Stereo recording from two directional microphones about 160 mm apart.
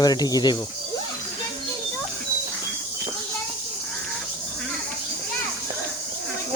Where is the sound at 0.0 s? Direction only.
25° left (ahead or behind).